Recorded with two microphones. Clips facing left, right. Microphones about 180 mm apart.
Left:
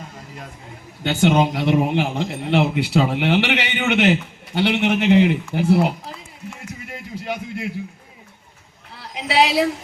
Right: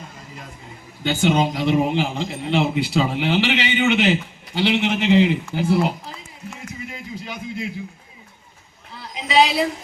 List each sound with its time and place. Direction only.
1.0 s speech: 65° left (ahead or behind)
6.9 s a sound: 65° left (ahead or behind)
9.0 s a woman's voice: 70° left (ahead or behind)